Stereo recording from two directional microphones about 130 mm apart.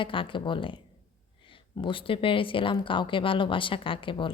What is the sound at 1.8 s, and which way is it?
A woman's voice, 40° left (ahead or behind).